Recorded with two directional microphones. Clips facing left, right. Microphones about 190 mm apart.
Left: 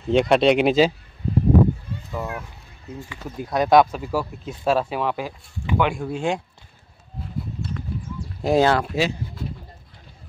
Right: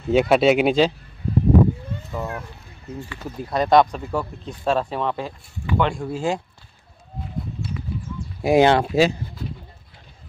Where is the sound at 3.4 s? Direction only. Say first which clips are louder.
Even; centre (ahead or behind).